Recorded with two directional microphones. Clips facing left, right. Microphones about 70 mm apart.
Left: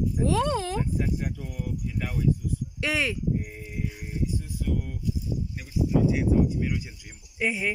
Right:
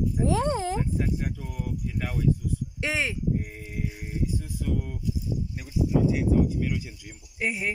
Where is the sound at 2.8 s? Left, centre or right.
Centre.